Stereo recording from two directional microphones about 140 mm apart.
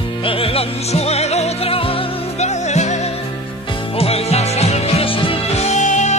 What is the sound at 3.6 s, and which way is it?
Music, 35° left (ahead or behind).